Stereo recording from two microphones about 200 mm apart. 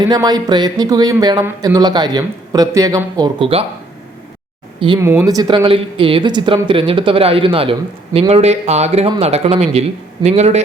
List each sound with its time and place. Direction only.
0.0 s speech: 20° right (ahead or behind)
4.9 s speech: 15° right (ahead or behind); by 10.6 s 35° right (ahead or behind)